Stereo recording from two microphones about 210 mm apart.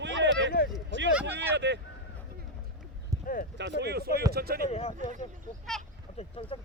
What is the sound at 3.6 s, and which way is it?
Speech, 55° right (ahead or behind).